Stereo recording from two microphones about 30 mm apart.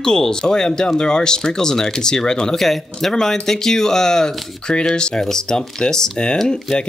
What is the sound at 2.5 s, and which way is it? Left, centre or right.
Speech, centre.